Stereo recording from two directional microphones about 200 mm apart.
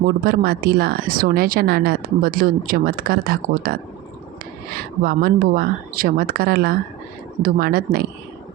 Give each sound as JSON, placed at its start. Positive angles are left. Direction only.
{"t": 0.3, "sound": "a woman's voice", "side_deg": -50}